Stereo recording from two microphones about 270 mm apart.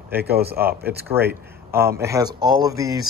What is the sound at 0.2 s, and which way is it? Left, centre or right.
Speech, right.